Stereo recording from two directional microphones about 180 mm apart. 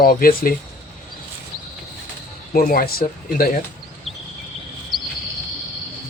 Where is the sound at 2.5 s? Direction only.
55° left (ahead or behind).